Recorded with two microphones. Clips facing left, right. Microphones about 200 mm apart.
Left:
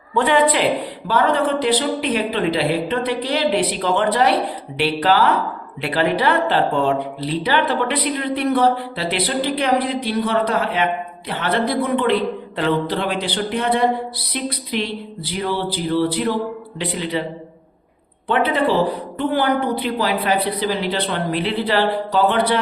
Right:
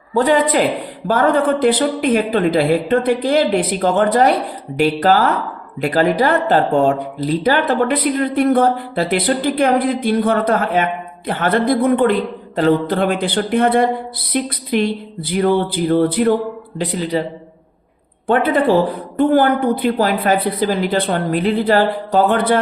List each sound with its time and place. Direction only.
0.1 s speech: 40° right (ahead or behind)
16.7 s speech: 40° right (ahead or behind)
18.3 s speech: 50° right (ahead or behind)